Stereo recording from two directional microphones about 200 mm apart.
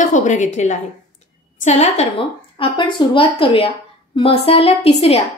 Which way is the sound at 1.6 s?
35° left (ahead or behind).